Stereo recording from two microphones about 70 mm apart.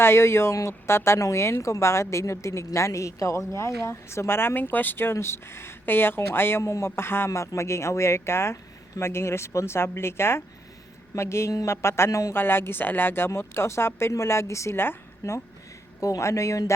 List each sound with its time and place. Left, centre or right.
0.0 s speech: left
7.3 s speech: left
12.3 s speech: left